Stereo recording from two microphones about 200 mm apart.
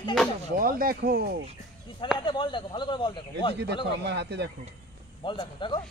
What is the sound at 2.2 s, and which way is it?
Speech, 25° left (ahead or behind).